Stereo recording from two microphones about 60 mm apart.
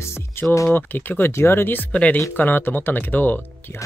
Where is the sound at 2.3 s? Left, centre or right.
Left.